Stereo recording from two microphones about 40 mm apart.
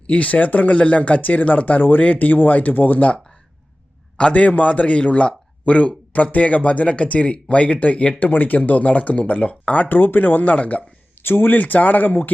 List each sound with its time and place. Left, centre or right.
0.1 s speech: left
4.3 s speech: left
8.2 s speech: left
9.9 s speech: left
10.5 s speech: left
11.2 s speech: left
11.5 s speech: left